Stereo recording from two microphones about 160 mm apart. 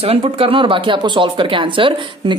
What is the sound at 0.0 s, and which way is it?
A woman's voice, 40° right (ahead or behind).